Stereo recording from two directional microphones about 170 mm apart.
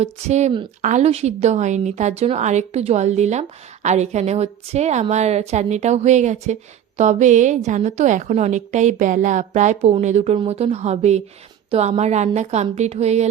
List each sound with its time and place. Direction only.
0.0 s a woman's voice: 40° right (ahead or behind)